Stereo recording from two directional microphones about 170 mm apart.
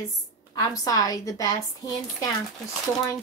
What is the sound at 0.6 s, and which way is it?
Speech, 20° left (ahead or behind).